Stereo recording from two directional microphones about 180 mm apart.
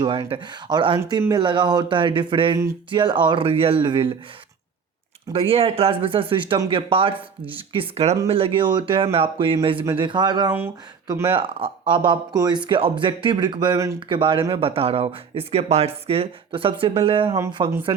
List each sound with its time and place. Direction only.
0.0 s speech: 30° right (ahead or behind)
5.3 s speech: 30° right (ahead or behind)
14.2 s speech: 30° right (ahead or behind)